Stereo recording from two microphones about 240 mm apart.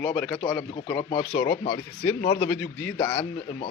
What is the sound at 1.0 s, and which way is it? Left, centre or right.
Speech, left.